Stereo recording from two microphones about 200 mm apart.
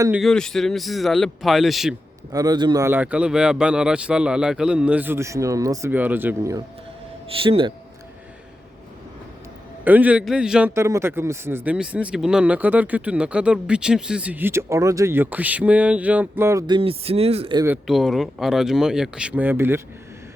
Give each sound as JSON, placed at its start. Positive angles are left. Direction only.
{"t": 0.2, "sound": "speech", "side_deg": 0}
{"t": 2.3, "sound": "a man's voice", "side_deg": -20}
{"t": 7.4, "sound": "speech", "side_deg": -25}
{"t": 9.8, "sound": "a man's voice", "side_deg": -10}
{"t": 17.8, "sound": "speech", "side_deg": 0}